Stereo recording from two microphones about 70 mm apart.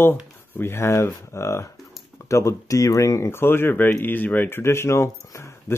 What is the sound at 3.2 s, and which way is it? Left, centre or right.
Speech, left.